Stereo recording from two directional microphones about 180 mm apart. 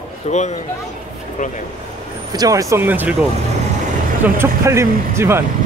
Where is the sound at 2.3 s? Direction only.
20° right (ahead or behind).